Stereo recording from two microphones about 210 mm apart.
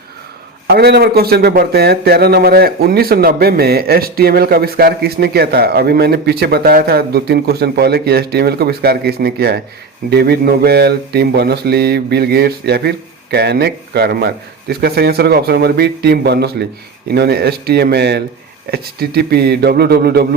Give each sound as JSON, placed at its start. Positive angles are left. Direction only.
{"t": 0.7, "sound": "speech", "side_deg": -50}